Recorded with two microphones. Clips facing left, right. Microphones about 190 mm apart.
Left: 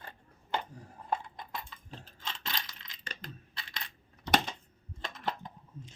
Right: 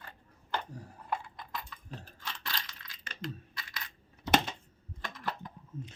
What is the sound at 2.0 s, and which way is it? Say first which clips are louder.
Coin: left 3 dB; 20° left (ahead or behind).